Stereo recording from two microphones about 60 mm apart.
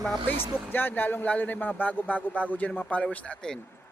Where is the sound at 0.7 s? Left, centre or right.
Left.